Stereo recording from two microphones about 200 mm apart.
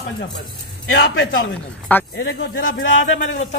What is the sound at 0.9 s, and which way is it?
Speech, 70° left (ahead or behind).